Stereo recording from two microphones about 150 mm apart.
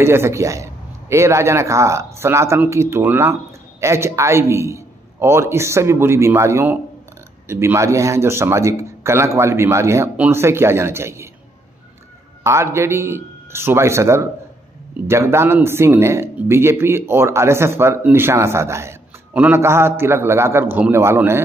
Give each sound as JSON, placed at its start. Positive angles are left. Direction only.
{"t": 0.0, "sound": "a man's voice", "side_deg": -15}
{"t": 12.4, "sound": "a man's voice", "side_deg": -15}